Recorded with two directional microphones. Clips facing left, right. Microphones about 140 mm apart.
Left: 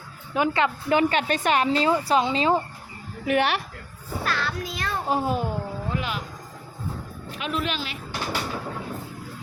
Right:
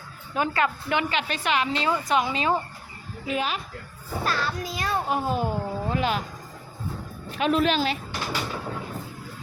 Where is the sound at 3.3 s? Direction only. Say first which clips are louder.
Left 5 dB; 70° left (ahead or behind).